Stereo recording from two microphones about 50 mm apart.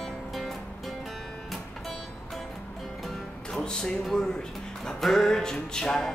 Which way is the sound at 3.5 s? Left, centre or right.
Centre.